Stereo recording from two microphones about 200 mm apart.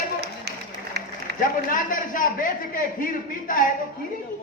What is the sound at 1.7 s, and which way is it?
A man's voice, 40° left (ahead or behind).